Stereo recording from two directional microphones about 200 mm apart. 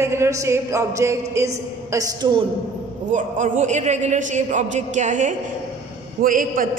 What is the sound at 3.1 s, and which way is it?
A woman's voice, 40° right (ahead or behind).